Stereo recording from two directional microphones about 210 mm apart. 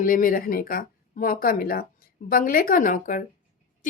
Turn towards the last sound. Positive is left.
turn(degrees=40)  # may be behind; listen again after turning